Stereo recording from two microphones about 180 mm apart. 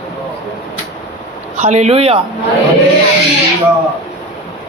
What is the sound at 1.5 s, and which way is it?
Speech, 40° right (ahead or behind).